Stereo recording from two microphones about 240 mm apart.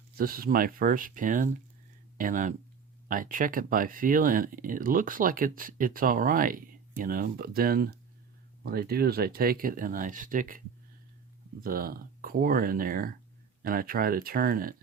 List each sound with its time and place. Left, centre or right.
0.2 s speech: right
11.6 s speech: right